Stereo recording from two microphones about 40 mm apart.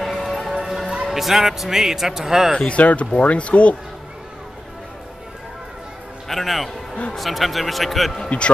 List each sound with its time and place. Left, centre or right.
0.0 s music: centre
0.6 s music: centre
1.0 s speech: centre
2.7 s speech: left
6.2 s a man's voice: centre
8.3 s speech: left